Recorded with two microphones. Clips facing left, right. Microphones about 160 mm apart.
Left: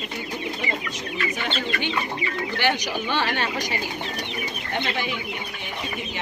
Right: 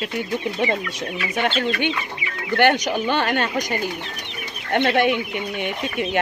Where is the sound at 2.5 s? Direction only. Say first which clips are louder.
Right 9 dB; 55° right (ahead or behind).